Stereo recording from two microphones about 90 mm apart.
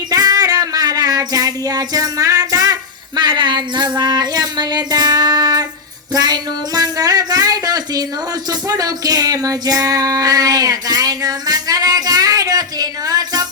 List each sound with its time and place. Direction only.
0.1 s child singing: 45° right (ahead or behind)
3.2 s speech: 55° right (ahead or behind)
6.1 s a sound: 45° right (ahead or behind)
8.4 s music: 45° right (ahead or behind)